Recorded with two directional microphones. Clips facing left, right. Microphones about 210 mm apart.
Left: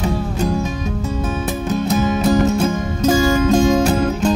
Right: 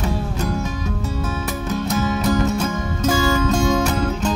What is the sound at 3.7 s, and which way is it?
Music, 35° left (ahead or behind).